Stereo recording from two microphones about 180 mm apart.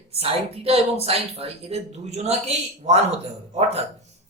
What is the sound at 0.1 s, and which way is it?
Speech, 35° right (ahead or behind).